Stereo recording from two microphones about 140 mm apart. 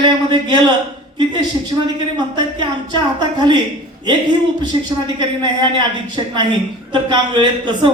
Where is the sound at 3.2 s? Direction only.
30° right (ahead or behind).